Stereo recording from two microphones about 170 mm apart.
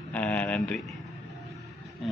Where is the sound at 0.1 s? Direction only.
10° left (ahead or behind).